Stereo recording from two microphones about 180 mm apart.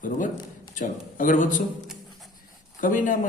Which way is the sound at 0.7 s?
45° left (ahead or behind).